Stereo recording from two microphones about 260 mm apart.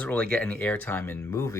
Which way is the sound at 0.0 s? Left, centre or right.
Centre.